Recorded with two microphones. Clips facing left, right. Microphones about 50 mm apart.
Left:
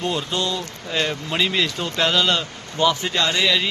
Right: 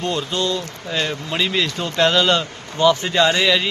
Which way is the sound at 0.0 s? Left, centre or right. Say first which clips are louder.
Right 2 dB; centre.